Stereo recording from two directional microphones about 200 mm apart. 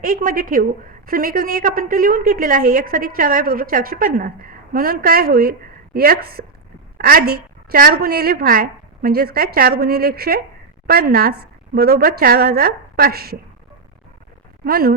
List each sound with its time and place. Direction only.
0.0 s a woman's voice: 45° right (ahead or behind)
14.6 s speech: 50° right (ahead or behind)